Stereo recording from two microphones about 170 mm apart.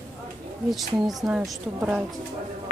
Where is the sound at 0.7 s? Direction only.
Centre (ahead or behind).